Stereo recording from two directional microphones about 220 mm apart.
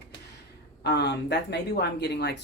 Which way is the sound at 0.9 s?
50° left (ahead or behind).